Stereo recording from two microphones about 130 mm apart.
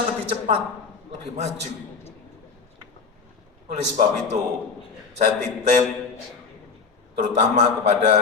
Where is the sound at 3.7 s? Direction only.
60° right (ahead or behind).